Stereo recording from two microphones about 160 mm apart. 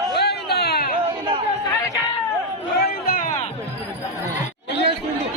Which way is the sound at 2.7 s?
75° left (ahead or behind).